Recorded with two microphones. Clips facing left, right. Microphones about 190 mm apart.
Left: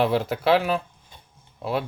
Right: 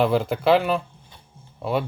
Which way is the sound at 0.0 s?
5° left (ahead or behind).